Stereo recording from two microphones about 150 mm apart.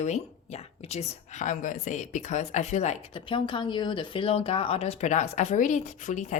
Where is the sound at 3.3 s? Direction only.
30° left (ahead or behind).